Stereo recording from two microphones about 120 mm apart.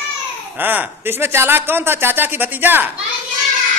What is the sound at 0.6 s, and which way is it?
Speech, 15° right (ahead or behind).